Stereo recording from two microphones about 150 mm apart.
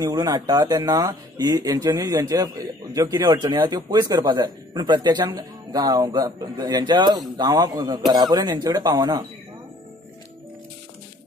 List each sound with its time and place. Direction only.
0.0 s speech: 25° right (ahead or behind)